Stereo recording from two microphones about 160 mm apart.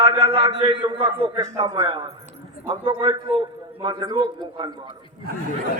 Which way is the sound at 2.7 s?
30° right (ahead or behind).